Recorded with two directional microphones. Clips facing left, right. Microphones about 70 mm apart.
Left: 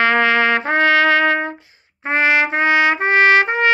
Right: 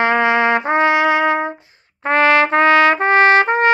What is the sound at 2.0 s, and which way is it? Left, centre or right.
Trumpet, right.